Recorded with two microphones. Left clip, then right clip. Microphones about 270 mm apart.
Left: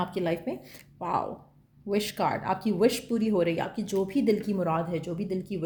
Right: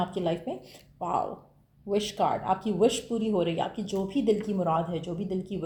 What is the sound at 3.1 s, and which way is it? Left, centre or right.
Speech, left.